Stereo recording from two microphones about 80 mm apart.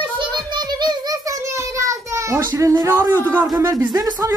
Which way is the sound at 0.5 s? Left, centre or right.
Right.